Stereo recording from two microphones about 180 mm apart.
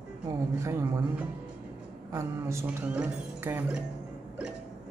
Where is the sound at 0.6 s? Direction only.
15° right (ahead or behind).